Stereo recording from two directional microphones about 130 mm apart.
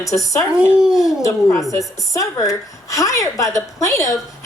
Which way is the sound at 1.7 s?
25° left (ahead or behind).